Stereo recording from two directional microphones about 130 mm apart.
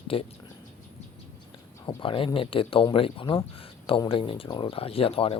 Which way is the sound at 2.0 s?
40° left (ahead or behind).